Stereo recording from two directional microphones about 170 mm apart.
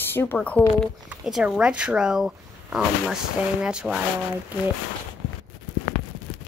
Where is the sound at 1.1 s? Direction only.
5° right (ahead or behind).